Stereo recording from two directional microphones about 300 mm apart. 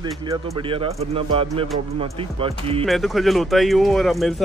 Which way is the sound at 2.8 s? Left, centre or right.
Centre.